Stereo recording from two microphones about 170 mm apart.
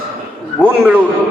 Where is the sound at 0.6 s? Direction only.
10° right (ahead or behind).